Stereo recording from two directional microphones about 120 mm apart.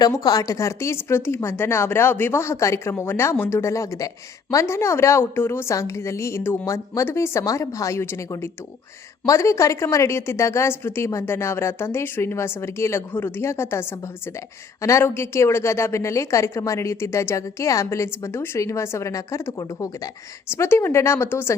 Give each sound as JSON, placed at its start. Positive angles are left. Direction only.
{"t": 0.0, "sound": "a woman's voice", "side_deg": 30}